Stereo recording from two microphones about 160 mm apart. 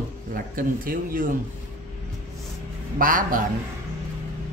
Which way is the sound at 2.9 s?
60° right (ahead or behind).